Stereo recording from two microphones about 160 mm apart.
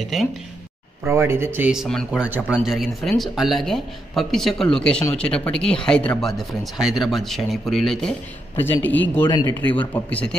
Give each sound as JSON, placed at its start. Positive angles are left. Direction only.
{"t": 0.0, "sound": "speech", "side_deg": 0}
{"t": 1.0, "sound": "speech", "side_deg": -15}
{"t": 9.7, "sound": "speech", "side_deg": 10}